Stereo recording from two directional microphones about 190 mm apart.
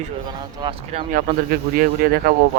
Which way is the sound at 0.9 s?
45° right (ahead or behind).